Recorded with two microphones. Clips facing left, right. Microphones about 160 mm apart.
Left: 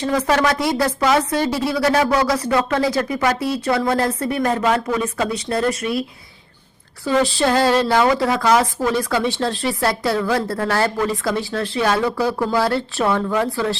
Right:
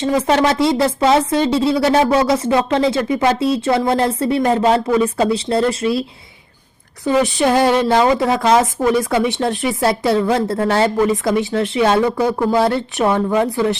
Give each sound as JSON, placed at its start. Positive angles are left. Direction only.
{"t": 0.0, "sound": "speech", "side_deg": -25}